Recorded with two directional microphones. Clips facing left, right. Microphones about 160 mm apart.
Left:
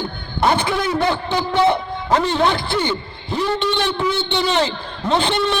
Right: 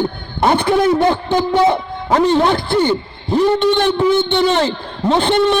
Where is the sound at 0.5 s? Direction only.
55° right (ahead or behind).